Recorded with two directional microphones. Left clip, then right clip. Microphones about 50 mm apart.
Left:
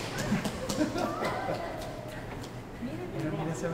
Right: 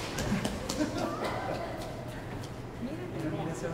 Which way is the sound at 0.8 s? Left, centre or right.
Centre.